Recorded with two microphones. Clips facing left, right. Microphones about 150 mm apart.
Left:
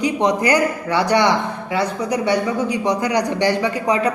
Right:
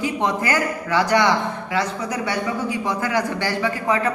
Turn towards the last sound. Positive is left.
turn(degrees=20)  # may be behind; listen again after turning